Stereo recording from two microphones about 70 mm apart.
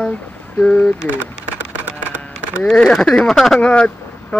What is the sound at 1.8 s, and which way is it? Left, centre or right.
Music, right.